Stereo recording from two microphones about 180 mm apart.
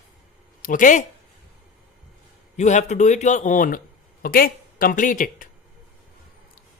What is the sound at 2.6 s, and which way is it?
Speech, 40° left (ahead or behind).